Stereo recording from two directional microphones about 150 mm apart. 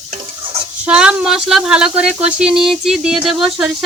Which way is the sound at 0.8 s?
5° right (ahead or behind).